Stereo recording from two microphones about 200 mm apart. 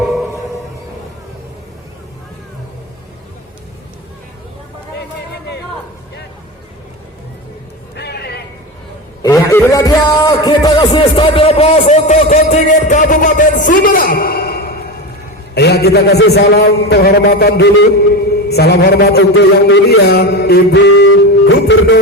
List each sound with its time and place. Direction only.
7.9 s a sound: 55° left (ahead or behind)
9.2 s a man's voice: 15° left (ahead or behind); by 19.3 s 55° left (ahead or behind)
19.3 s music: 65° left (ahead or behind)